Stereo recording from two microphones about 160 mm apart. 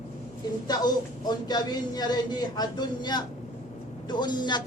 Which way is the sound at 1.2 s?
25° left (ahead or behind).